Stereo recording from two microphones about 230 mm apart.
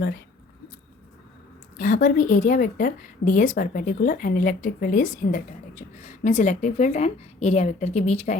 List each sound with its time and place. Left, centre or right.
1.8 s a woman's voice: left